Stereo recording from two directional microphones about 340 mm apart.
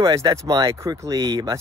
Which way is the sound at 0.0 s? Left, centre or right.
Centre.